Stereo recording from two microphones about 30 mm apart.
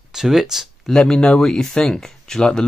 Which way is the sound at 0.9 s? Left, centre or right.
Left.